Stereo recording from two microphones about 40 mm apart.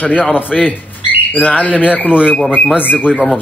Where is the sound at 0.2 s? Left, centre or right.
Left.